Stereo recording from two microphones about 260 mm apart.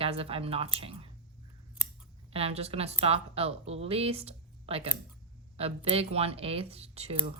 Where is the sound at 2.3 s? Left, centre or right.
Right.